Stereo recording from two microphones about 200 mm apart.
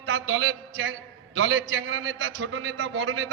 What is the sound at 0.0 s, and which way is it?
A man's voice, 80° right.